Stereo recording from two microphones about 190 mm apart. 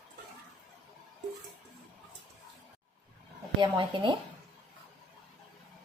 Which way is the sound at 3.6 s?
25° right (ahead or behind).